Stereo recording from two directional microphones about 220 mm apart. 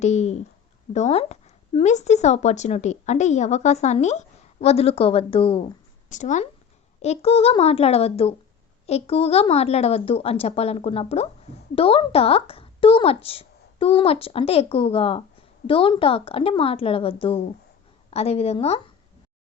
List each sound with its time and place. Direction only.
0.0 s speech: 30° left (ahead or behind)